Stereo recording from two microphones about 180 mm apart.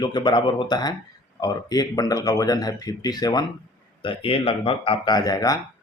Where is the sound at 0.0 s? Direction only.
25° left (ahead or behind).